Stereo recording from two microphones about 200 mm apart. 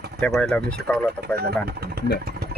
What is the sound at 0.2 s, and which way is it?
Speech, 5° left (ahead or behind).